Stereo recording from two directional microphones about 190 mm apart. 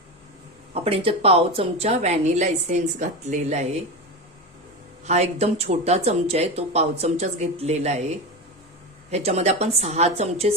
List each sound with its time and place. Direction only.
0.7 s a woman's voice: 30° right (ahead or behind)
5.0 s a woman's voice: 35° right (ahead or behind)
9.0 s a woman's voice: 35° right (ahead or behind)